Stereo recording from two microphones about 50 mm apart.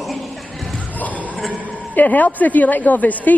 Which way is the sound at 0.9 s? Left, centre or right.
Left.